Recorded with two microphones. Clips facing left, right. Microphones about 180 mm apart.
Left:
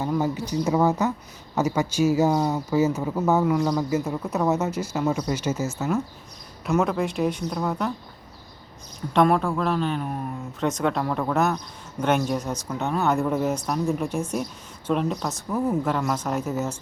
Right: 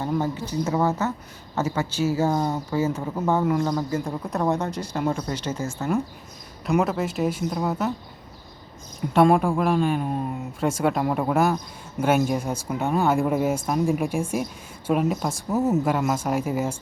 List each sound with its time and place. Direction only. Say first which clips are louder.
0.2 s speech: left 1 dB; 15° left (ahead or behind); by 7.9 s 5° right (ahead or behind)
9.3 s speech: right 3 dB; 15° right (ahead or behind)
10.0 s speech: right 3 dB; 20° right (ahead or behind)
10.6 s speech: right 1 dB; 10° right (ahead or behind)
15.4 s speech: right 2 dB; 25° right (ahead or behind)
15.8 s speech: right 2 dB; 10° right (ahead or behind)